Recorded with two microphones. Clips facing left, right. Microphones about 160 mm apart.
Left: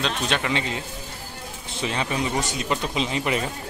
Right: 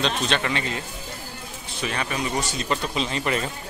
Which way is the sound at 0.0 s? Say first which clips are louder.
Right 1 dB; 10° left (ahead or behind).